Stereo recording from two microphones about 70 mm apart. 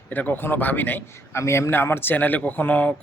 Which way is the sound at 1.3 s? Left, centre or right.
Left.